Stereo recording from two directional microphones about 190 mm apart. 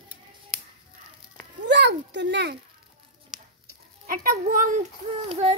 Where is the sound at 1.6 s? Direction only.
65° right (ahead or behind).